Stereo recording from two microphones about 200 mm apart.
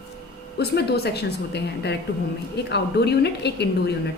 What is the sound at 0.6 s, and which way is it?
A woman's voice, 55° left (ahead or behind).